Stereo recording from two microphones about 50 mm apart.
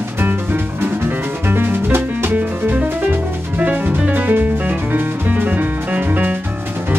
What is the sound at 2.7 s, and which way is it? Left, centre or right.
Music, right.